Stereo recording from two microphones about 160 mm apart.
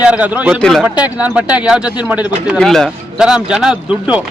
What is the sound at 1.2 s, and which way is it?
Speech, 10° right (ahead or behind).